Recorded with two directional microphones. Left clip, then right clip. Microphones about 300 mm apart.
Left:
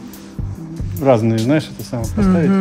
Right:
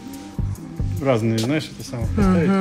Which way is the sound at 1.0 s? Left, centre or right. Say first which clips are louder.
Left 6 dB; left.